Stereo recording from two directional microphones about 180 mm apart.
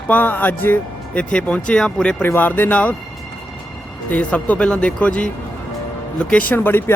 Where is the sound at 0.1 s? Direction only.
10° left (ahead or behind).